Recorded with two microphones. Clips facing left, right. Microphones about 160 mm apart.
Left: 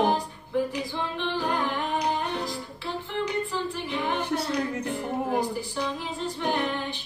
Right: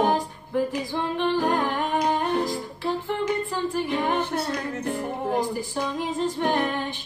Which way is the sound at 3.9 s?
50° right (ahead or behind).